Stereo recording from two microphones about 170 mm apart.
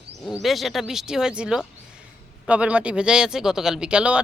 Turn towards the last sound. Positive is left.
turn(degrees=-5)  # may be behind; listen again after turning